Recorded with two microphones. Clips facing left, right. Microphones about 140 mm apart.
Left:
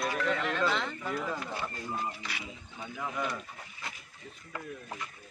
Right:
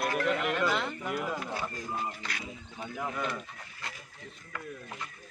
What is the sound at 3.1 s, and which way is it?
Speech, centre (ahead or behind).